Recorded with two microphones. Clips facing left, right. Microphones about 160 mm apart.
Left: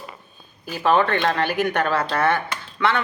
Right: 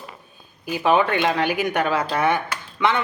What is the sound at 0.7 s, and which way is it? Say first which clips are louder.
A woman's voice: even; 10° right (ahead or behind).